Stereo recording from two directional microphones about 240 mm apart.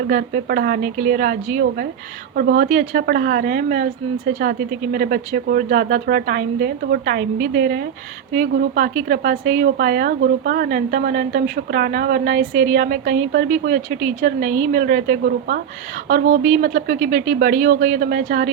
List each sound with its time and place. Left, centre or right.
0.1 s speech: right